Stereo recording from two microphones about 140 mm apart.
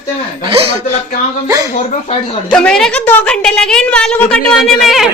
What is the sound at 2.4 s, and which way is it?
A woman's voice, 5° left (ahead or behind).